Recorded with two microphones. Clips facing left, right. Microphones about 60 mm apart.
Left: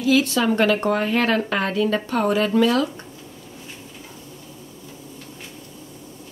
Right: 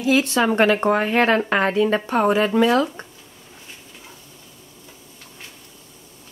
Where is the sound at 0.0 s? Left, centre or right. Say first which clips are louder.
Even; right.